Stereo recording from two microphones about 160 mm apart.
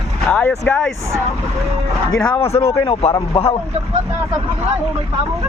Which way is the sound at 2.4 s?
40° left (ahead or behind).